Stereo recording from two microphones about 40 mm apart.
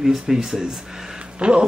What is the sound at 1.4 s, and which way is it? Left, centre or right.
Speech, right.